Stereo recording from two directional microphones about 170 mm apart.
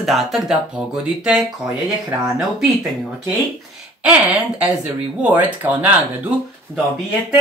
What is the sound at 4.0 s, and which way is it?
Speech, 10° right (ahead or behind).